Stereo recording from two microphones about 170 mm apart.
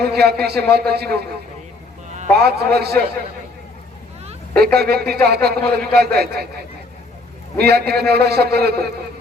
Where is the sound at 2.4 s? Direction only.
70° right (ahead or behind).